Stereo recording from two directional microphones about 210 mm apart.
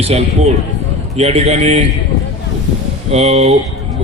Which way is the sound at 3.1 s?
30° right (ahead or behind).